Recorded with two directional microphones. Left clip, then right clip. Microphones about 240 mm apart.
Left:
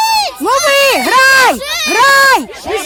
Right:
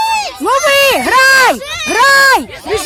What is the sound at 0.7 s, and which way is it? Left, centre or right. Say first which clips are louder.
Speech: even; centre.